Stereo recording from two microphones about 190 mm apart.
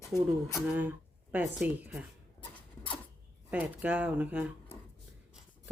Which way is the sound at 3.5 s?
10° right (ahead or behind).